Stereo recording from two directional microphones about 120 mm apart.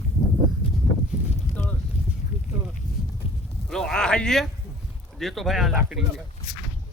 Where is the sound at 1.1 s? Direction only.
10° right (ahead or behind).